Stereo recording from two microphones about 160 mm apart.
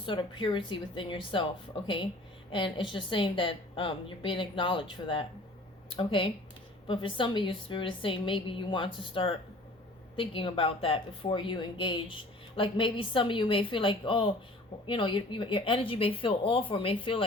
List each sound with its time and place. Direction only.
0.0 s speech: 30° left (ahead or behind)
2.5 s speech: 30° left (ahead or behind)